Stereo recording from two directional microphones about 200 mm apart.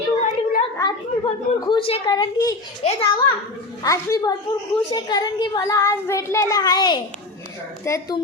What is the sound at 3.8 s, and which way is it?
A child's voice, 15° left (ahead or behind).